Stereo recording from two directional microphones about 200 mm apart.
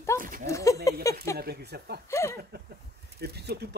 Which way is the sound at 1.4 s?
50° right (ahead or behind).